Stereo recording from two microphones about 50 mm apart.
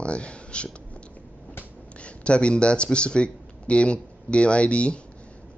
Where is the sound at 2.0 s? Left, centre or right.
Left.